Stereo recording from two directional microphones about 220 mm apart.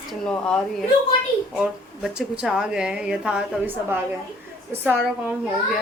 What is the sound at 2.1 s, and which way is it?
A woman's voice, 5° right (ahead or behind).